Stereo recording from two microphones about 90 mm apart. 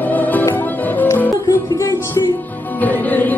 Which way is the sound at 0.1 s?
20° left (ahead or behind).